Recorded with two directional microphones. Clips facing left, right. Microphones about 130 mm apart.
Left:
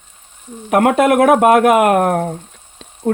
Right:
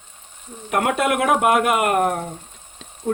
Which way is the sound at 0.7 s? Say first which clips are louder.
Left 8 dB; 55° left (ahead or behind).